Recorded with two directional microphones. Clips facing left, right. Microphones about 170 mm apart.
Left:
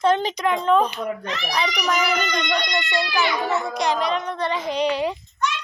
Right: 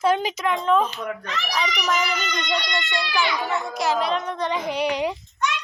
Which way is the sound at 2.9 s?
Centre (ahead or behind).